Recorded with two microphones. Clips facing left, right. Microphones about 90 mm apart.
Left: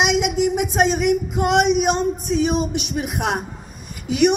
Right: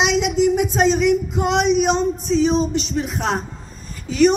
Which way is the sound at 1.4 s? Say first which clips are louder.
Left 4 dB; 55° left (ahead or behind).